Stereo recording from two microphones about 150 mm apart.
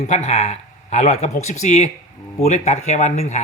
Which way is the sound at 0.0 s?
50° left (ahead or behind).